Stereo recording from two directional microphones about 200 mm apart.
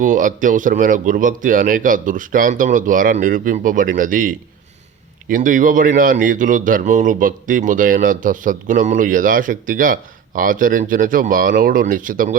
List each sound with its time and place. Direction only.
0.0 s speech: 40° right (ahead or behind)